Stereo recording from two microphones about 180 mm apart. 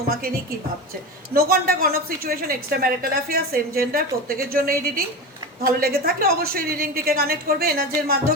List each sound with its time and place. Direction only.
1.3 s speech: 55° right (ahead or behind)